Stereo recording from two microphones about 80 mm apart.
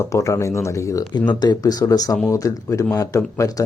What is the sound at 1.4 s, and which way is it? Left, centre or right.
Speech, left.